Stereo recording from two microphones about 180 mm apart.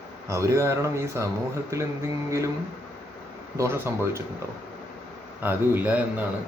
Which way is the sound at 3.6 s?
15° right (ahead or behind).